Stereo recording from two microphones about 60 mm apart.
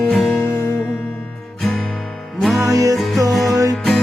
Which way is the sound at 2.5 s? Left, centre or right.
Right.